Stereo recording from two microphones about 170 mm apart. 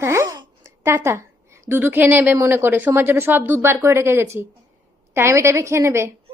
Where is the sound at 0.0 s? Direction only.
15° right (ahead or behind).